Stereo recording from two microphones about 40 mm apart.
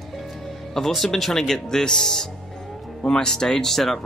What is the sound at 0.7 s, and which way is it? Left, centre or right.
Speech, centre.